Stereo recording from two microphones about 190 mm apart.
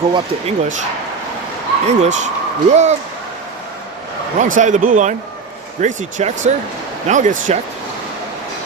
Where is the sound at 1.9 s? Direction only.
40° right (ahead or behind).